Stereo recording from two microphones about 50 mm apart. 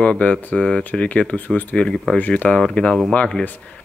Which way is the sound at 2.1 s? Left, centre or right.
Left.